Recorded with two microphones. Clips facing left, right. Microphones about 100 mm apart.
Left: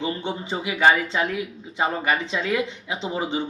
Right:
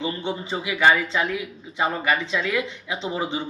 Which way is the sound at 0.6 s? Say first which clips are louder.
Even; 35° left (ahead or behind).